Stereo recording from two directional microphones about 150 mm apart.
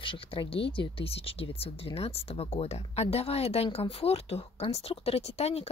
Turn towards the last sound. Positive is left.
turn(degrees=45)  # may be behind; listen again after turning